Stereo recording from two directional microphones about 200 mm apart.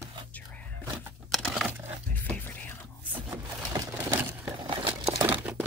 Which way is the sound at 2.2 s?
5° left (ahead or behind).